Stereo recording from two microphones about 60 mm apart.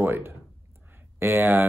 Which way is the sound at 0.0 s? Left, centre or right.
Right.